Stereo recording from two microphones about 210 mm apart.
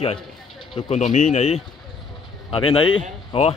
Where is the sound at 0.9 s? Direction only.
35° left (ahead or behind).